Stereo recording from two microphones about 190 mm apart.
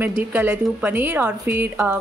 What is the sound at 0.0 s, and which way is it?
A woman's voice, 10° right (ahead or behind).